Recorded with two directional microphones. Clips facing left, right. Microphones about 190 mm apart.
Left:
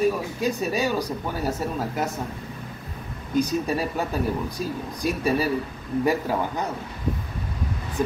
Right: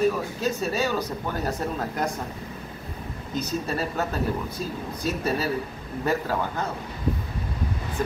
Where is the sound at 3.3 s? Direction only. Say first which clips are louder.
Left 5 dB; 10° left (ahead or behind).